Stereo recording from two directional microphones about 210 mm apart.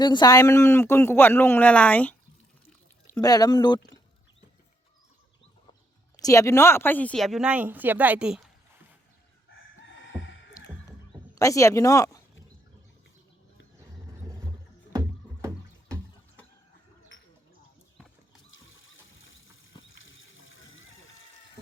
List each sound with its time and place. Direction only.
0.0 s a man's voice: 20° left (ahead or behind)
3.1 s a man's voice: 15° left (ahead or behind)
6.2 s speech: 15° left (ahead or behind); by 8.4 s 5° right (ahead or behind)
11.3 s a man's voice: 15° left (ahead or behind)
14.9 s music: 15° right (ahead or behind)
18.5 s horse: 70° left (ahead or behind)
19.8 s a sound: 65° left (ahead or behind)